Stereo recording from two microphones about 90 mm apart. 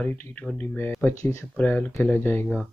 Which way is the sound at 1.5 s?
15° left (ahead or behind).